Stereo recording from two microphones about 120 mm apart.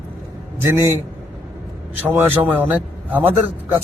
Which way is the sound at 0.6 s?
20° right (ahead or behind).